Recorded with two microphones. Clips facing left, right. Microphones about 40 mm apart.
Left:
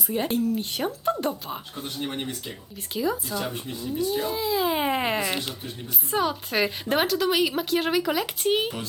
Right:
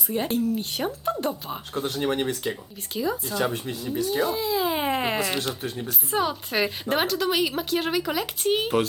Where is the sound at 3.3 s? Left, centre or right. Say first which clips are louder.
Right 4 dB; right.